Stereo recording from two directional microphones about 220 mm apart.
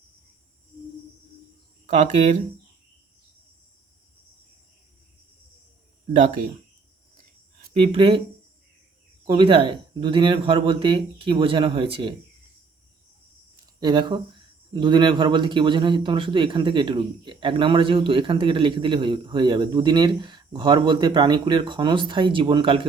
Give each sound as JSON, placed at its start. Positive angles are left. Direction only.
{"t": 2.0, "sound": "speech", "side_deg": -35}
{"t": 6.1, "sound": "speech", "side_deg": -35}
{"t": 7.8, "sound": "speech", "side_deg": -25}
{"t": 9.2, "sound": "speech", "side_deg": -20}
{"t": 13.7, "sound": "speech", "side_deg": -20}